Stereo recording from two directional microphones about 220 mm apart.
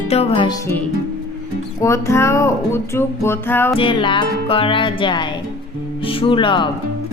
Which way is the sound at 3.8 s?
20° left (ahead or behind).